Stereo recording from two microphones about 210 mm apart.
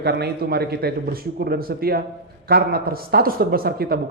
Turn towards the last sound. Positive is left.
turn(degrees=-45)  # may be behind; listen again after turning